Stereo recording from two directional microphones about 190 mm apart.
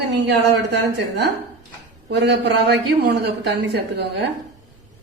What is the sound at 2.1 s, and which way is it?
Speech, 65° right (ahead or behind).